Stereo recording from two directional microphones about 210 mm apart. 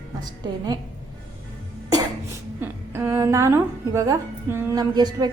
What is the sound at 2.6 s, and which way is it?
A woman's voice, 10° right (ahead or behind).